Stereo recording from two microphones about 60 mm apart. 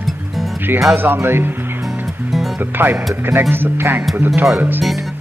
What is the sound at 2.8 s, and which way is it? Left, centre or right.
Speech, right.